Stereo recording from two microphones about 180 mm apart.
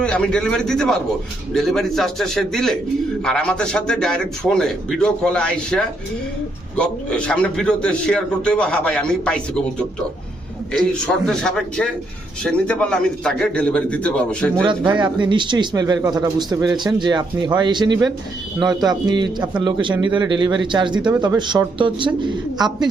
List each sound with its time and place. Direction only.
0.0 s a man's voice: 5° left (ahead or behind)
14.5 s speech: 25° right (ahead or behind)